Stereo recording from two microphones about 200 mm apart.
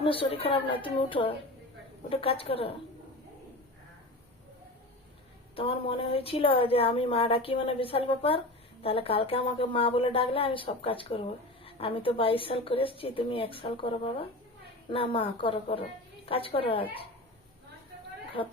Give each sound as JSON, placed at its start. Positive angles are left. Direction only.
{"t": 0.0, "sound": "speech", "side_deg": 25}
{"t": 5.5, "sound": "speech", "side_deg": 30}
{"t": 18.4, "sound": "speech", "side_deg": 25}